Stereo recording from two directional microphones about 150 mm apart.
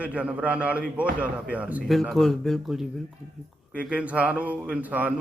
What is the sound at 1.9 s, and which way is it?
A man's voice, centre (ahead or behind).